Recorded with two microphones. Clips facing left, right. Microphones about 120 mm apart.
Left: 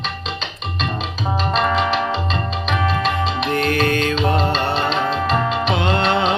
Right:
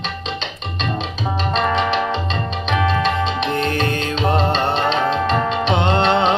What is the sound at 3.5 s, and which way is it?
Music, 25° right (ahead or behind).